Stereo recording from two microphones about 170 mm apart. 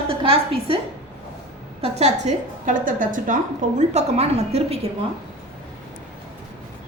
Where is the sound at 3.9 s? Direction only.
40° right (ahead or behind).